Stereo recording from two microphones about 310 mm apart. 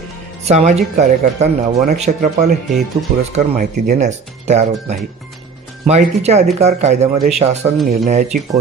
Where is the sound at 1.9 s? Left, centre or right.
Right.